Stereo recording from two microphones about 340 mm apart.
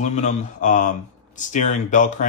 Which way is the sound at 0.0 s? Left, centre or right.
Left.